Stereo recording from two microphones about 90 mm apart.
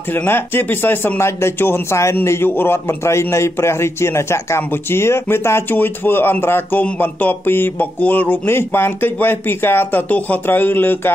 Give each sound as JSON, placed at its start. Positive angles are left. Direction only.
{"t": 0.1, "sound": "a man's voice", "side_deg": 25}